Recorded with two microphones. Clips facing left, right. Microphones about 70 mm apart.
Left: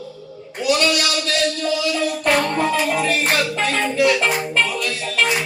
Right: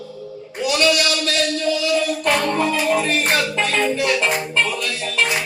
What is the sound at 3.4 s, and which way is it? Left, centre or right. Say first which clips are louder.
Music: even; left.